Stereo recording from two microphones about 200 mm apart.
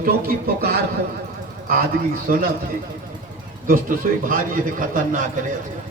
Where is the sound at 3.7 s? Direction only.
45° right (ahead or behind).